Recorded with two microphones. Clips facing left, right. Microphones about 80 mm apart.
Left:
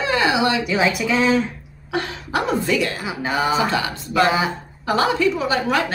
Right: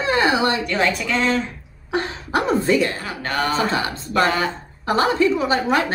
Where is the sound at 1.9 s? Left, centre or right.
Right.